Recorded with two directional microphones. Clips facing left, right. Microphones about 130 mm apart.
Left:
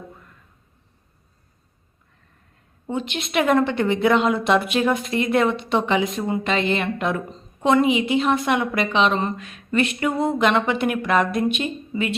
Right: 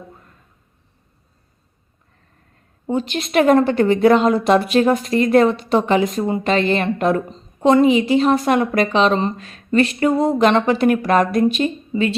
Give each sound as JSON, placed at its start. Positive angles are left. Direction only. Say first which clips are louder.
{"t": 2.8, "sound": "a woman's voice", "louder": "right 5 dB", "side_deg": -40}